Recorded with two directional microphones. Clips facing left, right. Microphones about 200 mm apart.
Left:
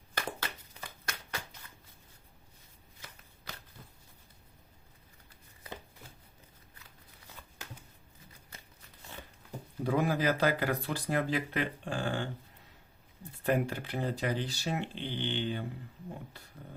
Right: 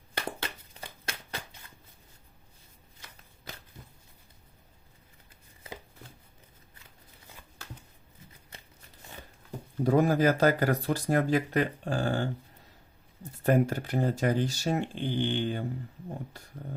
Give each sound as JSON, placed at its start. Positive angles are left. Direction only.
{"t": 0.3, "sound": "a sound", "side_deg": -30}
{"t": 9.8, "sound": "speech", "side_deg": -40}
{"t": 13.4, "sound": "speech", "side_deg": -45}